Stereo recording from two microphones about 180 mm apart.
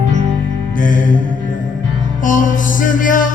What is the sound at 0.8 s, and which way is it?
Music, 45° left (ahead or behind).